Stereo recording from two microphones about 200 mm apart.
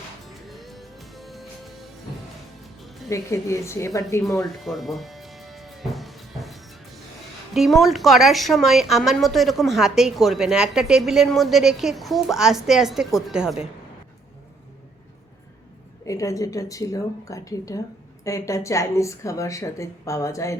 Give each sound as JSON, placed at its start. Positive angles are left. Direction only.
{"t": 0.4, "sound": "music", "side_deg": 0}
{"t": 3.1, "sound": "speech", "side_deg": 15}
{"t": 4.4, "sound": "music", "side_deg": 0}
{"t": 7.5, "sound": "speech", "side_deg": 0}
{"t": 16.0, "sound": "speech", "side_deg": 15}